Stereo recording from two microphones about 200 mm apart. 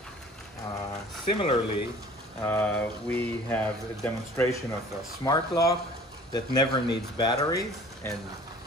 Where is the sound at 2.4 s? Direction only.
10° left (ahead or behind).